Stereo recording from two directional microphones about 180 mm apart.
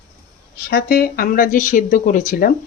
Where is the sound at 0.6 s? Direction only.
55° left (ahead or behind).